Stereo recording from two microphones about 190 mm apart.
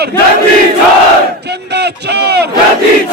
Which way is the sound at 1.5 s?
60° right (ahead or behind).